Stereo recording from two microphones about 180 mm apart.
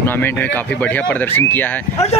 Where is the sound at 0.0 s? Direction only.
10° left (ahead or behind).